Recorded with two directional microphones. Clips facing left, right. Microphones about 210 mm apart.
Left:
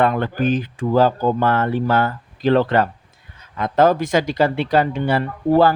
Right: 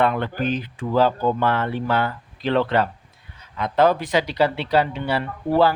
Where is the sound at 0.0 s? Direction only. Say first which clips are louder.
Left 3 dB; 45° left (ahead or behind).